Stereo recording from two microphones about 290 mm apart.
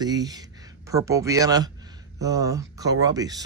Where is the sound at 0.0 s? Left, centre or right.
Centre.